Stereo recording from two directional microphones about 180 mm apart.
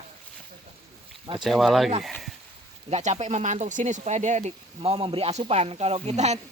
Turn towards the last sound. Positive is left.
turn(degrees=-40)  # may be behind; listen again after turning